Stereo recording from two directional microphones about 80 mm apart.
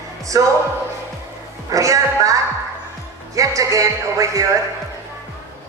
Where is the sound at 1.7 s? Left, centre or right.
Right.